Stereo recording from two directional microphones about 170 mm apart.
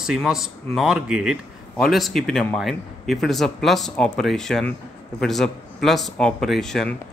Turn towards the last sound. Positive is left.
turn(degrees=0)  # may be behind; listen again after turning